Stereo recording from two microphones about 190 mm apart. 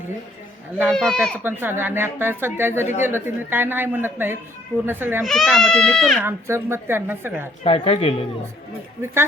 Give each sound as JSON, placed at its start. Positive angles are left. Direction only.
{"t": 0.9, "sound": "a child's voice", "side_deg": 5}
{"t": 1.5, "sound": "speech", "side_deg": -10}
{"t": 5.2, "sound": "a child's voice", "side_deg": 0}
{"t": 6.2, "sound": "speech", "side_deg": -15}
{"t": 7.6, "sound": "speech", "side_deg": 30}